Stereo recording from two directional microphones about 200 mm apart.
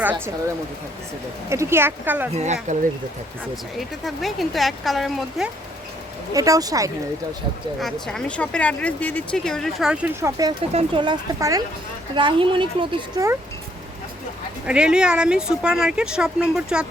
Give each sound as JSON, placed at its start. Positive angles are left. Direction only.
{"t": 1.5, "sound": "speech", "side_deg": -15}
{"t": 2.3, "sound": "speech", "side_deg": -35}
{"t": 3.8, "sound": "speech", "side_deg": 0}
{"t": 6.3, "sound": "speech", "side_deg": -15}
{"t": 7.8, "sound": "speech", "side_deg": 0}
{"t": 10.7, "sound": "speech", "side_deg": -30}
{"t": 14.7, "sound": "speech", "side_deg": -5}